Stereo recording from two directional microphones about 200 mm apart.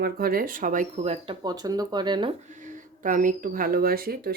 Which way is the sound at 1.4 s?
20° right (ahead or behind).